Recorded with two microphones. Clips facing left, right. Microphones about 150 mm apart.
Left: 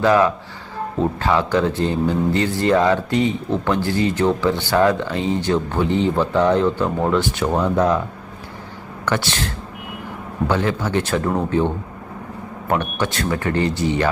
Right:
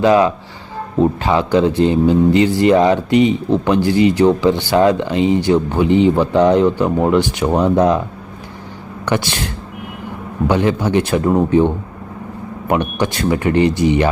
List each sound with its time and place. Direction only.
0.0 s a man's voice: 20° right (ahead or behind)
9.0 s a man's voice: 15° right (ahead or behind)
10.5 s a man's voice: 15° right (ahead or behind)